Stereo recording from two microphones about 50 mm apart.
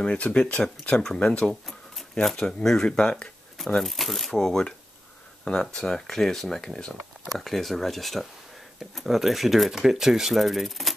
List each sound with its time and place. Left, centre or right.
0.0 s speech: left
1.5 s a sound: centre
2.6 s speech: centre
7.3 s speech: centre